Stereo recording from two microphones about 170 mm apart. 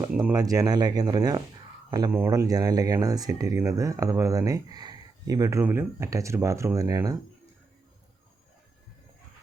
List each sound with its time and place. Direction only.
0.3 s speech: 20° right (ahead or behind)